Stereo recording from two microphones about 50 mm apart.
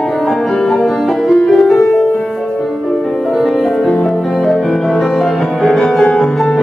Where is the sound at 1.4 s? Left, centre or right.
Centre.